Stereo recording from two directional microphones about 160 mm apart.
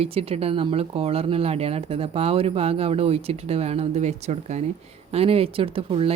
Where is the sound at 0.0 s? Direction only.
40° right (ahead or behind).